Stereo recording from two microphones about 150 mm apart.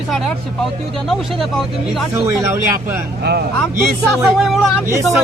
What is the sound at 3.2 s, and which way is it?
Speech, 90° right.